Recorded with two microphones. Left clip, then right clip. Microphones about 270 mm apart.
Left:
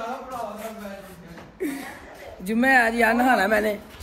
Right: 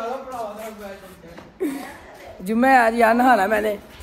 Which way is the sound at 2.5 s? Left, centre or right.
Centre.